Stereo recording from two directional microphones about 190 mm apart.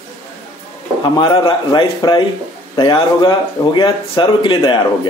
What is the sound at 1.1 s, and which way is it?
Speech, 25° left (ahead or behind).